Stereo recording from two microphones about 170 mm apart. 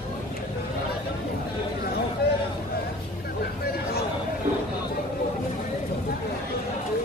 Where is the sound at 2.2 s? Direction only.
70° left (ahead or behind).